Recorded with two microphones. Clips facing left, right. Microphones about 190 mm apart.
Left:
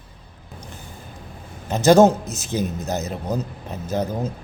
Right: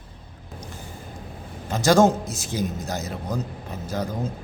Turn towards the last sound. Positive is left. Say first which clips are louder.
# left 4 dB
turn(degrees=20)  # may be behind; listen again after turning